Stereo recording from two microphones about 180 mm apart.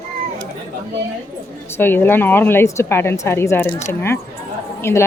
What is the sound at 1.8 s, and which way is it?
A woman's voice, 10° left (ahead or behind).